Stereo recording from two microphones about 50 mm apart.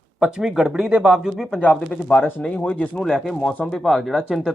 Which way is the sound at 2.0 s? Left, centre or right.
Left.